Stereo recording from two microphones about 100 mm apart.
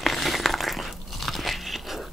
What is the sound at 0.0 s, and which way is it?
Crunch, centre (ahead or behind).